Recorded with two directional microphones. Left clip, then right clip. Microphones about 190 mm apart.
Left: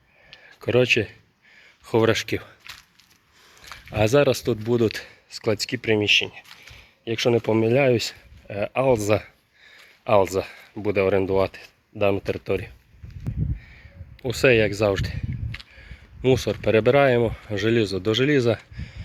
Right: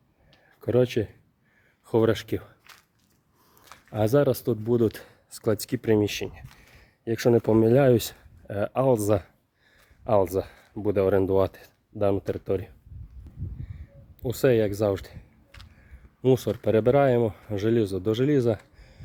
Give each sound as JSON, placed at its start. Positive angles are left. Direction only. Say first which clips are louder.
{"t": 0.6, "sound": "speech", "louder": "left 4 dB", "side_deg": -10}
{"t": 3.5, "sound": "a sound", "louder": "left 5 dB", "side_deg": -10}
{"t": 4.7, "sound": "speech", "louder": "left 2 dB", "side_deg": -15}
{"t": 11.9, "sound": "speech", "louder": "left 3 dB", "side_deg": -10}
{"t": 14.2, "sound": "speech", "louder": "left 4 dB", "side_deg": -5}
{"t": 16.2, "sound": "speech", "louder": "left 2 dB", "side_deg": -15}